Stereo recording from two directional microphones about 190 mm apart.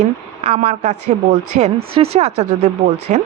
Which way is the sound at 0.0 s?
35° right (ahead or behind).